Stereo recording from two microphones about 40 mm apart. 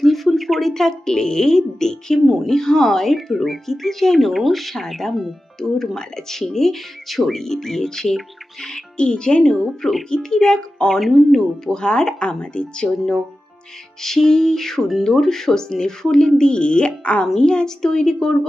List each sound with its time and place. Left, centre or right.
0.0 s speech: centre
2.2 s speech: centre
2.5 s speech: centre
11.0 s speech: centre
11.6 s speech: centre
14.0 s speech: centre